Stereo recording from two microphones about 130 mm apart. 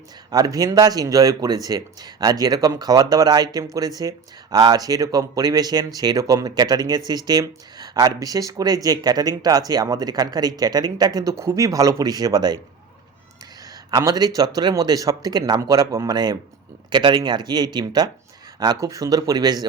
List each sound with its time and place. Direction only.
0.3 s speech: 30° right (ahead or behind)
13.9 s speech: 30° right (ahead or behind)